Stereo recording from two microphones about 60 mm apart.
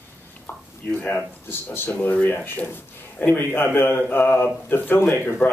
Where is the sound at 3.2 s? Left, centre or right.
Left.